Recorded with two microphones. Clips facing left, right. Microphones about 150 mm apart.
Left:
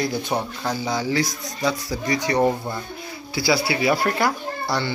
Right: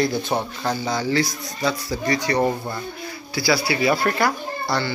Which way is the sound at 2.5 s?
5° left (ahead or behind).